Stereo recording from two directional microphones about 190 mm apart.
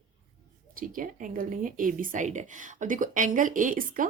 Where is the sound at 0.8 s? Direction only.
45° right (ahead or behind).